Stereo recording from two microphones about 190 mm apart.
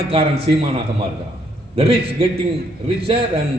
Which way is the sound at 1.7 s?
30° right (ahead or behind).